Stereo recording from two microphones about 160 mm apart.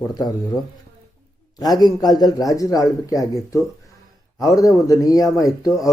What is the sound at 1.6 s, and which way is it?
Speech, 25° left (ahead or behind).